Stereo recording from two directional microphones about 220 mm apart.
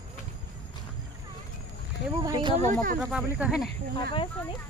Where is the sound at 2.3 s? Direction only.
20° right (ahead or behind).